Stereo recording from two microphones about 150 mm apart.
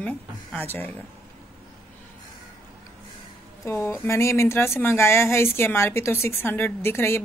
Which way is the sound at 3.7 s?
15° left (ahead or behind).